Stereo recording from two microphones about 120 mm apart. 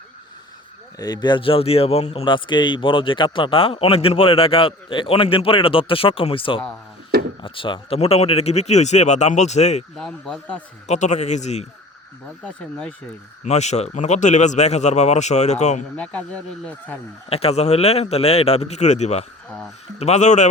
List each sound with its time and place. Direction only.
0.9 s speech: 35° left (ahead or behind); by 2.2 s 60° left (ahead or behind)
2.2 s speech: 40° left (ahead or behind); by 9.8 s 70° left (ahead or behind)
10.0 s speech: 5° left (ahead or behind)
10.8 s speech: 75° left (ahead or behind)
12.5 s speech: 10° left (ahead or behind)
13.4 s speech: 70° left (ahead or behind)
16.0 s speech: 10° left (ahead or behind)
17.2 s speech: 55° left (ahead or behind); by 20.5 s 80° left